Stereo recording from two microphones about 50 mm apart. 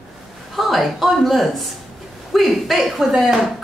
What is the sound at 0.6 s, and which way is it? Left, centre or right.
A woman's voice, centre.